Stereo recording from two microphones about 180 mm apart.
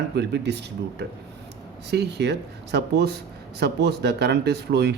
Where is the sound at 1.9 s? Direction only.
70° right (ahead or behind).